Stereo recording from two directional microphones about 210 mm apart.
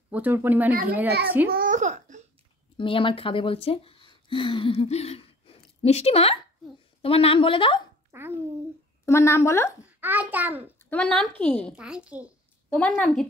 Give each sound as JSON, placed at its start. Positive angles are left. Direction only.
{"t": 0.1, "sound": "a child's voice", "side_deg": -10}
{"t": 1.5, "sound": "a sound", "side_deg": -40}
{"t": 2.8, "sound": "speech", "side_deg": 25}
{"t": 8.1, "sound": "a child's voice", "side_deg": -10}
{"t": 9.0, "sound": "a woman's voice", "side_deg": 15}
{"t": 9.9, "sound": "a child's voice", "side_deg": -10}
{"t": 10.9, "sound": "a child's voice", "side_deg": 5}
{"t": 12.6, "sound": "a child's voice", "side_deg": 5}